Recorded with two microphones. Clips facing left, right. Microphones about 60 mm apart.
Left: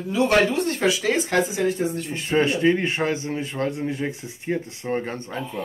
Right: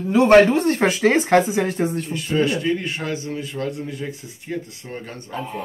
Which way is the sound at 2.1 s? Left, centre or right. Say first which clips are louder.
Left 1 dB; left.